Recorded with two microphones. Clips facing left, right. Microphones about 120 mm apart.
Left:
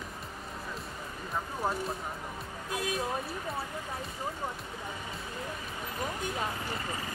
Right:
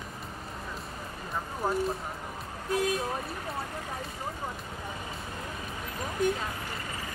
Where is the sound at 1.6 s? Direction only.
Centre (ahead or behind).